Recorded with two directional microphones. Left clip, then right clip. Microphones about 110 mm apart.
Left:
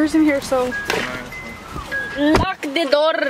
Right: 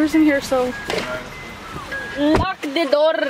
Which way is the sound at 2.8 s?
20° left (ahead or behind).